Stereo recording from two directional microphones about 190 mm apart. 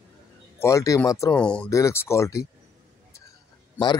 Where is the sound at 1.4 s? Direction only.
5° left (ahead or behind).